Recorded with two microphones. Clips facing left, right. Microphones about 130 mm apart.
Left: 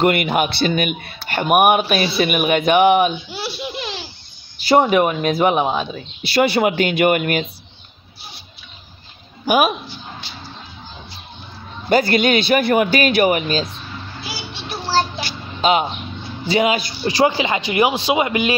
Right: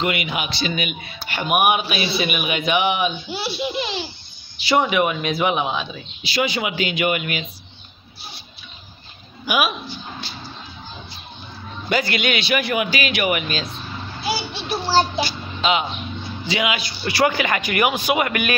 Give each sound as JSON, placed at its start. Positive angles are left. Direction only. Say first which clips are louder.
{"t": 0.0, "sound": "a man's voice", "louder": "left 7 dB", "side_deg": 50}
{"t": 3.6, "sound": "a sound", "louder": "right 3 dB", "side_deg": 0}
{"t": 4.6, "sound": "a woman's voice", "louder": "left 4 dB", "side_deg": 45}
{"t": 6.2, "sound": "a man's voice", "louder": "left 7 dB", "side_deg": 60}
{"t": 9.5, "sound": "a man's voice", "louder": "left 5 dB", "side_deg": 45}
{"t": 11.9, "sound": "a man's voice", "louder": "left 7 dB", "side_deg": 45}
{"t": 14.5, "sound": "a sound", "louder": "left 1 dB", "side_deg": -10}
{"t": 15.6, "sound": "a man's voice", "louder": "left 4 dB", "side_deg": 45}
{"t": 17.0, "sound": "speech", "louder": "left 2 dB", "side_deg": 25}